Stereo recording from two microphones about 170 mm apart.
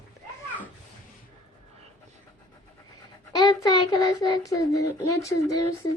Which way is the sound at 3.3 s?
25° left (ahead or behind).